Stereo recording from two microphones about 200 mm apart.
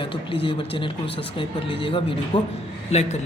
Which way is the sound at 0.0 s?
25° left (ahead or behind).